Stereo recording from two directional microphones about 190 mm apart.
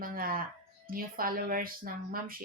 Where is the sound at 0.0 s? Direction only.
50° right (ahead or behind).